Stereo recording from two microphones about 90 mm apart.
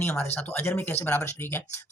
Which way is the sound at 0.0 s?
20° left (ahead or behind).